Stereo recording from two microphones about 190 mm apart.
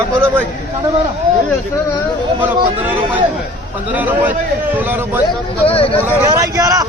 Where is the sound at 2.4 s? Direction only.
10° right (ahead or behind).